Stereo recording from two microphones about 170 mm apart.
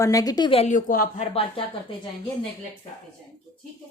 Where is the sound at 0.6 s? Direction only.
50° left (ahead or behind).